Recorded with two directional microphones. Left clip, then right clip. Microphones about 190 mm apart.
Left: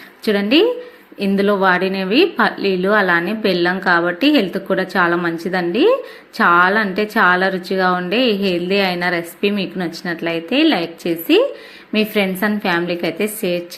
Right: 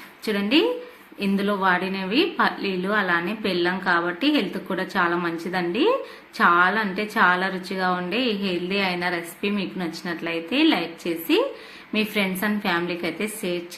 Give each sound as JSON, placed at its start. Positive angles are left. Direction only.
{"t": 0.3, "sound": "a woman's voice", "side_deg": 30}